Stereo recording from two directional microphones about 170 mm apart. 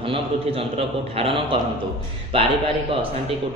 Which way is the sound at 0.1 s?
35° right (ahead or behind).